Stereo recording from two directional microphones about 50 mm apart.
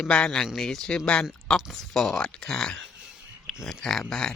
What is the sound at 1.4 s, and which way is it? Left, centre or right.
Speech, centre.